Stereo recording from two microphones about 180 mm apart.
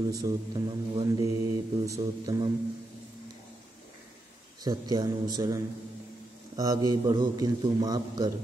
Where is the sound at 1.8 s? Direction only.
20° right (ahead or behind).